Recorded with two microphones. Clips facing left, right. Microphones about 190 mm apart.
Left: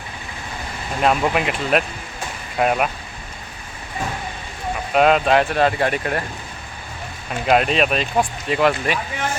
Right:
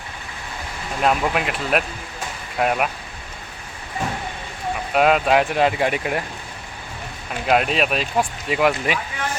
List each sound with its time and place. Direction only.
1.0 s speech: centre (ahead or behind)
4.9 s speech: 5° right (ahead or behind)
7.4 s speech: centre (ahead or behind)